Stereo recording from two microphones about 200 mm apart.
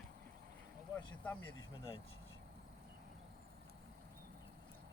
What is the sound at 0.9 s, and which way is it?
Speech, 10° left (ahead or behind).